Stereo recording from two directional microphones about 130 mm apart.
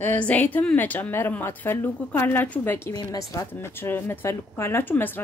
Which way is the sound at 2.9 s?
30° left (ahead or behind).